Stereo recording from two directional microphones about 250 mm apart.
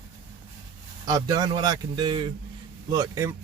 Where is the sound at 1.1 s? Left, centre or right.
Centre.